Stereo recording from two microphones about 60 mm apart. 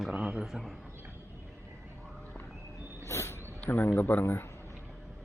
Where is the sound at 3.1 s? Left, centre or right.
Left.